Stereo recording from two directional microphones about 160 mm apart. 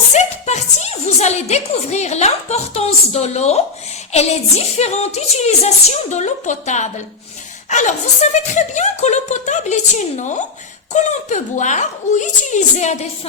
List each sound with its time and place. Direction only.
0.1 s a woman's voice: 45° left (ahead or behind)